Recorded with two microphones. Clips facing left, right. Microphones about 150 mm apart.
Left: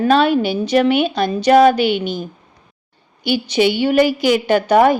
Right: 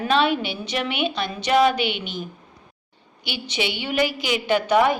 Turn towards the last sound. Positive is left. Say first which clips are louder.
# left 6 dB
turn(degrees=40)  # may be behind; listen again after turning